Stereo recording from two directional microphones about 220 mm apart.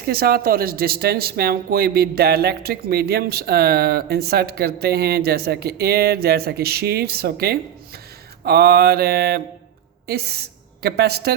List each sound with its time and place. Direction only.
0.0 s speech: 45° right (ahead or behind)